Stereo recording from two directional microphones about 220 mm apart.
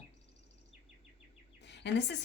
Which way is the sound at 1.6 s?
50° left (ahead or behind).